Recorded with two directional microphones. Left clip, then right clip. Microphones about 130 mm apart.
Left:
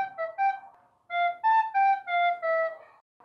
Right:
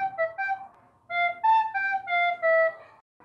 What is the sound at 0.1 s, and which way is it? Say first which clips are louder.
Music: even; 25° left (ahead or behind).